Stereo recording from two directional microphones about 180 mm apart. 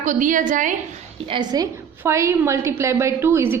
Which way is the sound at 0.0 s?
45° right (ahead or behind).